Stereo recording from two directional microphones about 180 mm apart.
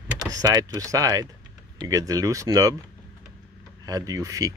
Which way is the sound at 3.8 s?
20° right (ahead or behind).